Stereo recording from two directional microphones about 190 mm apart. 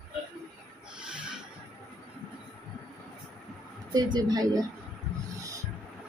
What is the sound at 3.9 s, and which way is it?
Speech, 20° right (ahead or behind).